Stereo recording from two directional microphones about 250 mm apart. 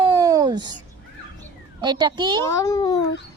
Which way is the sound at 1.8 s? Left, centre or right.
Centre.